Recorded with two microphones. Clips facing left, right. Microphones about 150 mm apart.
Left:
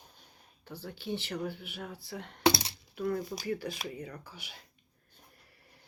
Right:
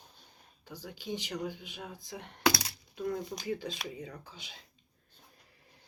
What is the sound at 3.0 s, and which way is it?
Speech, 80° left.